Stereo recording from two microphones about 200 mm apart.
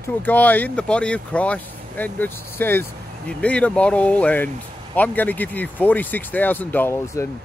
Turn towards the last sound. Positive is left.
turn(degrees=10)  # may be behind; listen again after turning